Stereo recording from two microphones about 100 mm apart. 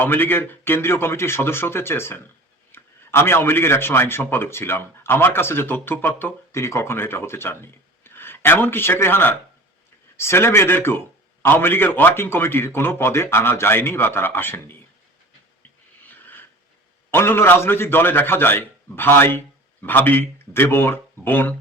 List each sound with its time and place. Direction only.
0.0 s speech: 20° left (ahead or behind)
17.1 s speech: 25° left (ahead or behind)